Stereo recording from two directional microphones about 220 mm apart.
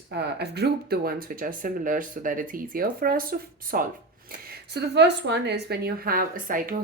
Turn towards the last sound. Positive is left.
turn(degrees=-40)  # may be behind; listen again after turning